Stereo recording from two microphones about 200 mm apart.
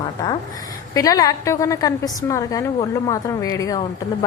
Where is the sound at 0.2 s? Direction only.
20° left (ahead or behind).